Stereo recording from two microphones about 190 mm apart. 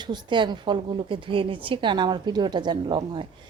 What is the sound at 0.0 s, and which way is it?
A woman's voice, 25° right (ahead or behind).